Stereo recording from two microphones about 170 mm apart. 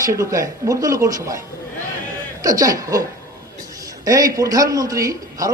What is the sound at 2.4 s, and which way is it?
A man's voice, 20° right (ahead or behind).